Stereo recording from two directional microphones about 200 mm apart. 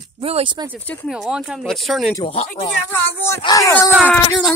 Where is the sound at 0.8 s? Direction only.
10° left (ahead or behind).